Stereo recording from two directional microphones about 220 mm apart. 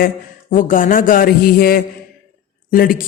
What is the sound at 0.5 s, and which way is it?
A woman's voice, 40° left (ahead or behind).